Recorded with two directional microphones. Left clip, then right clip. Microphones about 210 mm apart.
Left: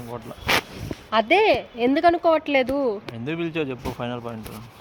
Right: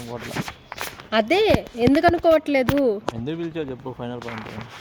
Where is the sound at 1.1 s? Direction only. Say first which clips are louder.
Left 1 dB; 55° right (ahead or behind).